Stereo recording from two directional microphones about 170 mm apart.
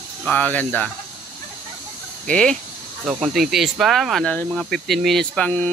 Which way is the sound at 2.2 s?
5° left (ahead or behind).